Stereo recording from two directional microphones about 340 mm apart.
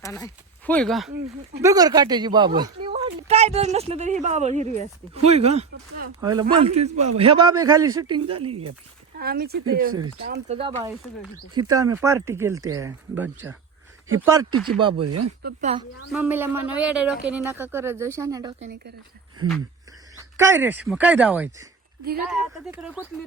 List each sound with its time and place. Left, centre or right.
0.0 s speech: centre
1.6 s speech: centre
8.4 s speech: right
9.1 s speech: right
9.9 s speech: right
10.2 s speech: right
10.6 s speech: centre
15.0 s speech: right
15.4 s speech: centre
16.1 s a woman's voice: centre
20.3 s a woman's voice: centre